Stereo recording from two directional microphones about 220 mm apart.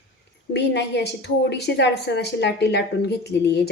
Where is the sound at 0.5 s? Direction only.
50° left (ahead or behind).